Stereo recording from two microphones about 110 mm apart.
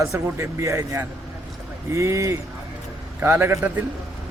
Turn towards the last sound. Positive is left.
turn(degrees=-20)  # may be behind; listen again after turning